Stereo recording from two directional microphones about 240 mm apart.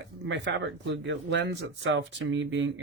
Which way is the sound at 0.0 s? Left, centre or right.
Right.